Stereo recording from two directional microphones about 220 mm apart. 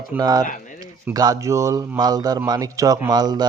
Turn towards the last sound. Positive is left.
turn(degrees=-20)  # may be behind; listen again after turning